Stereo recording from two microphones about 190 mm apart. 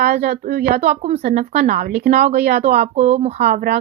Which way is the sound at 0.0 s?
40° right (ahead or behind).